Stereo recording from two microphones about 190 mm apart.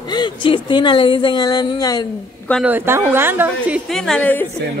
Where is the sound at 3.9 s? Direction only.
5° left (ahead or behind).